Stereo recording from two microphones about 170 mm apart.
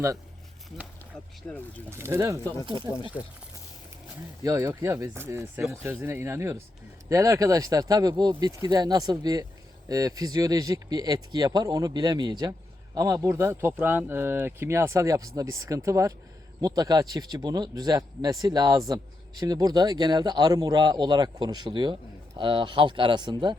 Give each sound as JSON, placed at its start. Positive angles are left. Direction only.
{"t": 1.5, "sound": "speech", "side_deg": 10}
{"t": 1.9, "sound": "speech", "side_deg": -15}
{"t": 4.4, "sound": "speech", "side_deg": -15}